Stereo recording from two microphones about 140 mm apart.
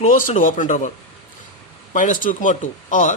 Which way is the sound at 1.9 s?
70° left (ahead or behind).